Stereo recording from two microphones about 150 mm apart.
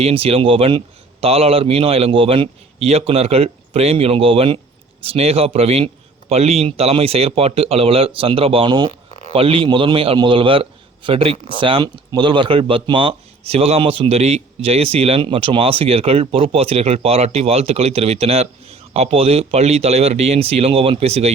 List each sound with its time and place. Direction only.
0.0 s a man's voice: 40° right (ahead or behind)